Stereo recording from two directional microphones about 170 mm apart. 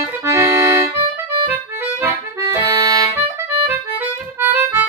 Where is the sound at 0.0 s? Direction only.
15° right (ahead or behind).